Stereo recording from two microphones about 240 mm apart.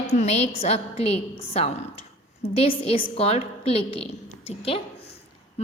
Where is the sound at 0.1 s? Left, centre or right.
Left.